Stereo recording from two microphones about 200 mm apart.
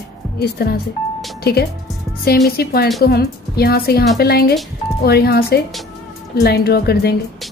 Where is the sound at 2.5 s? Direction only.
50° left (ahead or behind).